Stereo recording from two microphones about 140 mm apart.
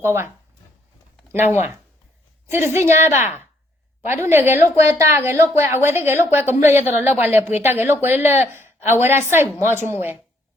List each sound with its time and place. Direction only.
0.0 s a woman's voice: 20° right (ahead or behind)
1.3 s a woman's voice: 15° right (ahead or behind)